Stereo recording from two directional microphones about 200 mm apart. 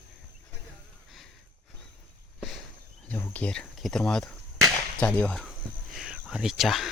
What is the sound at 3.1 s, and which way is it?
Speech, 10° left (ahead or behind).